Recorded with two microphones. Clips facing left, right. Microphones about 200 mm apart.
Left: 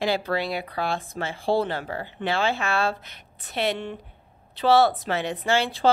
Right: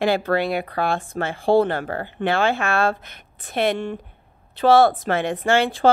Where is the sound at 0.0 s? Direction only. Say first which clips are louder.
Right 5 dB; 55° right (ahead or behind).